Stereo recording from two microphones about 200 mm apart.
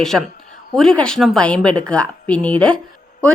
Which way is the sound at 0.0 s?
Centre (ahead or behind).